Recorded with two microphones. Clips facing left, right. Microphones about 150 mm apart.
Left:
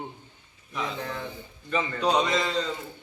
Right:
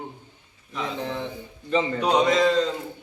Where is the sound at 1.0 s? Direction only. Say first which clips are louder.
Right 4 dB; 25° right (ahead or behind).